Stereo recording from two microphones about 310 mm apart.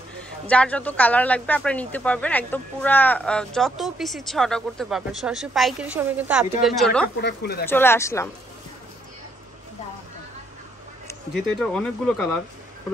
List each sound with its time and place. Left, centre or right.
0.5 s speech: centre
7.2 s speech: left
7.6 s speech: centre
11.1 s speech: centre